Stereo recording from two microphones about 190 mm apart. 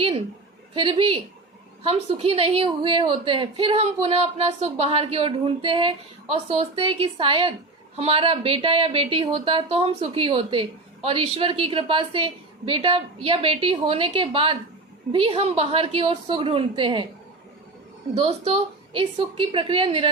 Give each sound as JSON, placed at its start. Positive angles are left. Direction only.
{"t": 0.8, "sound": "a woman's voice", "side_deg": -30}
{"t": 18.1, "sound": "a woman's voice", "side_deg": -30}